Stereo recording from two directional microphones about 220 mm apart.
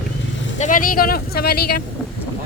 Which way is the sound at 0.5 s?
35° left (ahead or behind).